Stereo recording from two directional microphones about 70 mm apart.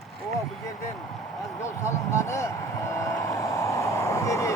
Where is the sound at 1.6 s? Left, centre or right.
Left.